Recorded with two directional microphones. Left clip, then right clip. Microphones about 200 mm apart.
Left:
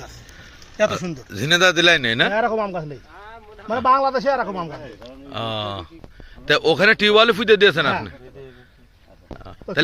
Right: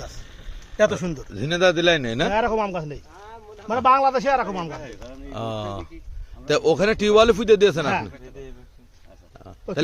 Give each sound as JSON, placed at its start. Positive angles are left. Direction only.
{"t": 1.4, "sound": "a man's voice", "side_deg": 10}
{"t": 2.1, "sound": "a man's voice", "side_deg": -5}
{"t": 5.0, "sound": "speech", "side_deg": 0}
{"t": 9.4, "sound": "a sound", "side_deg": 0}